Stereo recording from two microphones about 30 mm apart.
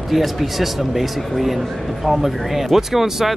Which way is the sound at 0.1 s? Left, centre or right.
Centre.